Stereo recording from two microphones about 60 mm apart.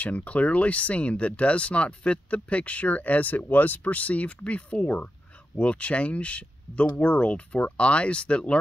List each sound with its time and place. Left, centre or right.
0.0 s speech: left